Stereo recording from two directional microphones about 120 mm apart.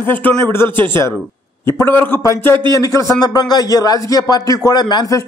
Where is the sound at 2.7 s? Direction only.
25° left (ahead or behind).